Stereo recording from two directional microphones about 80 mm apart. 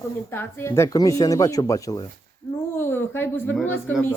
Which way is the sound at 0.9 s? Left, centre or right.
Left.